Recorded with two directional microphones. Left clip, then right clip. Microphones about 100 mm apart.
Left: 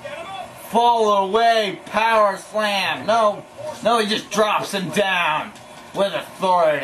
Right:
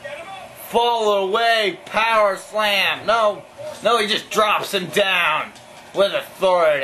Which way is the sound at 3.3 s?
25° right (ahead or behind).